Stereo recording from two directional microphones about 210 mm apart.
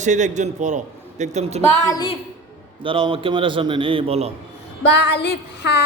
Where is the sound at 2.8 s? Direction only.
25° right (ahead or behind).